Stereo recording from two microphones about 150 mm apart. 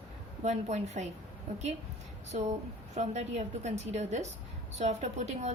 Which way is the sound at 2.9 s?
50° right (ahead or behind).